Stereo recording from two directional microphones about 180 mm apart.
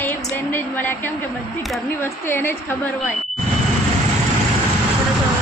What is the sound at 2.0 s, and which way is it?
Speech, 10° left (ahead or behind).